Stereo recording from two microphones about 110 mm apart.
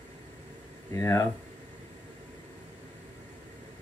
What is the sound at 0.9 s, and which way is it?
Speech, 25° left (ahead or behind).